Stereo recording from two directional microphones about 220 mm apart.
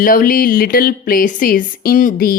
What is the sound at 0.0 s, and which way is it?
Speech, 40° left (ahead or behind).